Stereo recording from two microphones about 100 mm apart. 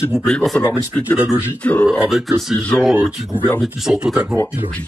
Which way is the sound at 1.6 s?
10° left (ahead or behind).